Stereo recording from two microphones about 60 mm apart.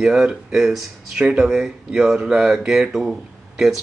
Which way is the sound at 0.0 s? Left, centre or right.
Centre.